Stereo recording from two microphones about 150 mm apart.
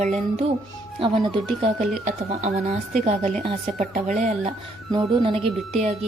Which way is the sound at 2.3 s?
45° right (ahead or behind).